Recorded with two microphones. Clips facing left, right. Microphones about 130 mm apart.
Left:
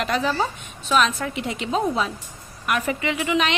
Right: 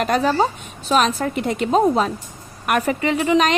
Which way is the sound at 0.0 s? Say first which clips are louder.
Right 5 dB; 40° right (ahead or behind).